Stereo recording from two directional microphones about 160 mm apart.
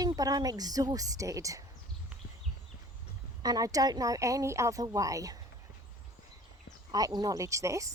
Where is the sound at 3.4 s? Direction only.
25° right (ahead or behind).